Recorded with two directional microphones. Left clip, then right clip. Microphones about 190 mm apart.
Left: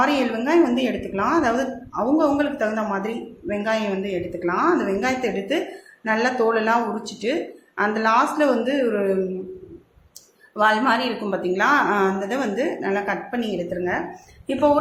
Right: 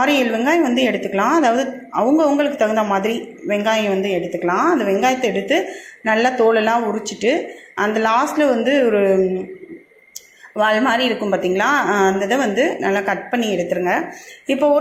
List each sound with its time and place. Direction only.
0.0 s a woman's voice: 20° right (ahead or behind)
10.6 s a woman's voice: 15° right (ahead or behind)